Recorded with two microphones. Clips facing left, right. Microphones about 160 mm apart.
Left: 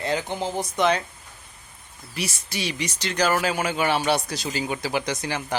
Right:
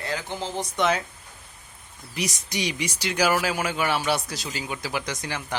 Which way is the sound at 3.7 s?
20° left (ahead or behind).